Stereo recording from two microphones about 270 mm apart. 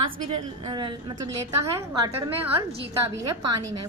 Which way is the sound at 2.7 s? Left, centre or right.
Centre.